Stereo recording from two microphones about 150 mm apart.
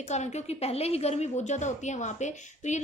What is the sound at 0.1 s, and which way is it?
A woman's voice, 50° left (ahead or behind).